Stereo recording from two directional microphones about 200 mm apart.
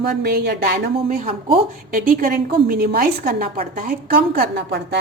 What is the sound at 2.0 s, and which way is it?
A woman's voice, 45° right (ahead or behind).